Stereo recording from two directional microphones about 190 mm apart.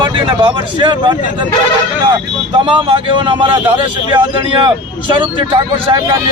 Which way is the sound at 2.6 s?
25° right (ahead or behind).